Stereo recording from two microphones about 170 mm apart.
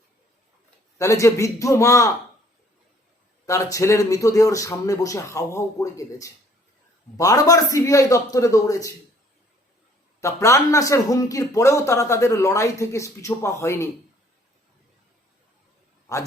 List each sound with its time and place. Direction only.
0.9 s speech: 20° left (ahead or behind)
3.4 s speech: 20° left (ahead or behind)
10.2 s speech: 15° left (ahead or behind)